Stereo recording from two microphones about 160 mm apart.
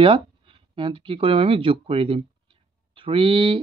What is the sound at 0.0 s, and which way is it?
Speech, 35° right (ahead or behind).